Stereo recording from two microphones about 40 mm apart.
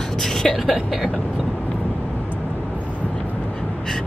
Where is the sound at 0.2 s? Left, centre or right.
Centre.